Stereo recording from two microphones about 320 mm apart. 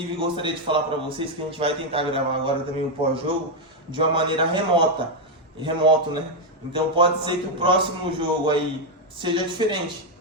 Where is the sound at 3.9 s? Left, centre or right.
Centre.